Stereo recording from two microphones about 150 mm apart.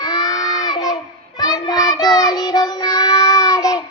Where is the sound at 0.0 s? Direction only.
25° left (ahead or behind).